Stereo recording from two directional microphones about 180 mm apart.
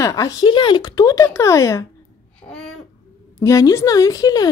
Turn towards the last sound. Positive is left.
turn(degrees=20)  # may be behind; listen again after turning